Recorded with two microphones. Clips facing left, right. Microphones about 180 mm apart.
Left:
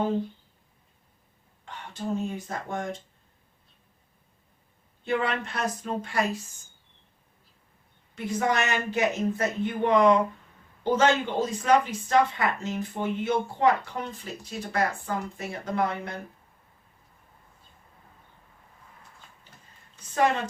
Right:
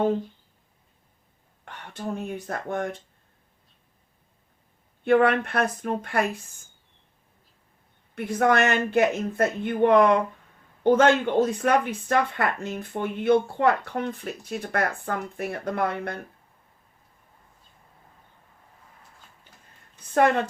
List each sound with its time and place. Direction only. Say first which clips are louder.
1.6 s speech: even; 55° right (ahead or behind)
5.0 s speech: right 8 dB; 55° right (ahead or behind)
8.1 s speech: right 5 dB; 60° right (ahead or behind)
20.1 s speech: right 4 dB; 55° right (ahead or behind)